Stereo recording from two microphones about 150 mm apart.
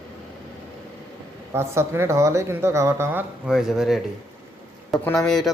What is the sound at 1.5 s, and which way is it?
Speech, 15° right (ahead or behind).